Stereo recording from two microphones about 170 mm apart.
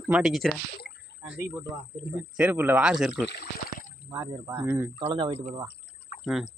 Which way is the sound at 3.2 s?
70° left (ahead or behind).